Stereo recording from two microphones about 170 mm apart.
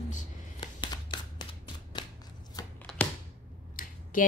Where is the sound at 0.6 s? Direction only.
25° left (ahead or behind).